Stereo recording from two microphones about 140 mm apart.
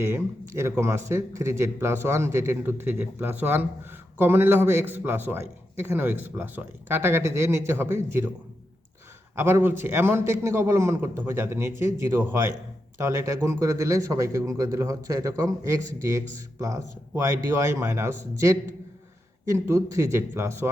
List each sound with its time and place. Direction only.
0.0 s a man's voice: 20° right (ahead or behind)
9.3 s a man's voice: 15° right (ahead or behind)